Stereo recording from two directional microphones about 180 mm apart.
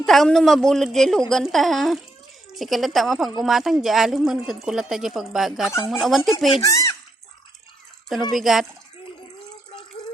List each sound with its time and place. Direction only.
0.0 s a woman's voice: centre (ahead or behind)
6.6 s speech: 20° left (ahead or behind)
8.3 s a woman's voice: centre (ahead or behind)